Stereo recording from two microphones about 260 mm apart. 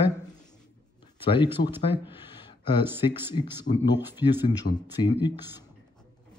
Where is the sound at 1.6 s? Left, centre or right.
Left.